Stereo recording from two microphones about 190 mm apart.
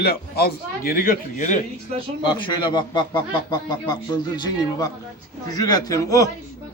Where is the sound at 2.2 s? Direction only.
25° left (ahead or behind).